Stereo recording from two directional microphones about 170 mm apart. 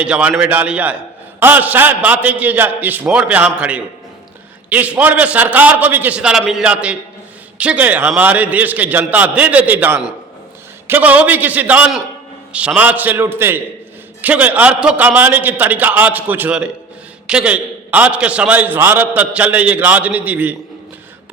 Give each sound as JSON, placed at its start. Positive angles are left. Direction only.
{"t": 0.0, "sound": "a man's voice", "side_deg": -5}